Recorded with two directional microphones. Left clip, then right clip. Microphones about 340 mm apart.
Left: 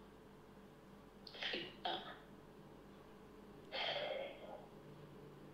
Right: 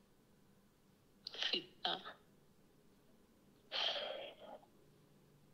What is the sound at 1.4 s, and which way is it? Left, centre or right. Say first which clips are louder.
Burping: right 4 dB; right.